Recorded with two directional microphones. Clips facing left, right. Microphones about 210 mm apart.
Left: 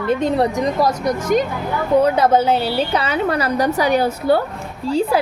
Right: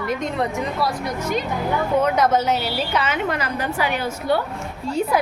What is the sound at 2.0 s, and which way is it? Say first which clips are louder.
A woman's voice: left 5 dB; 30° left (ahead or behind).